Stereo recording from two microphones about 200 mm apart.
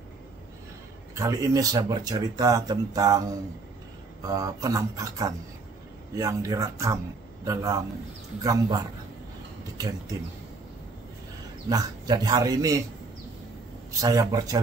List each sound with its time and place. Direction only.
1.1 s speech: 15° right (ahead or behind)
4.2 s speech: 20° right (ahead or behind)
11.7 s speech: 20° right (ahead or behind)
14.0 s speech: 20° right (ahead or behind)